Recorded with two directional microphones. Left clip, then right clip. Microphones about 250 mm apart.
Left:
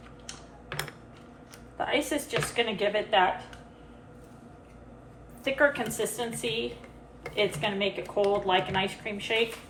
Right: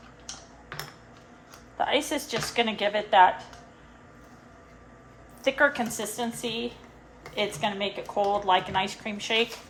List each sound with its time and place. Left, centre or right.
1.8 s speech: right
5.4 s speech: right